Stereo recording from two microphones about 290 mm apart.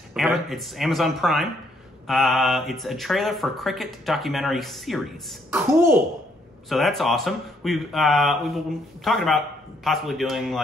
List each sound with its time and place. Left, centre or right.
0.1 s speech: centre
6.7 s speech: centre